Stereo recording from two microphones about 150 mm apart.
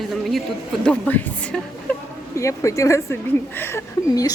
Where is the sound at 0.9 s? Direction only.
10° left (ahead or behind).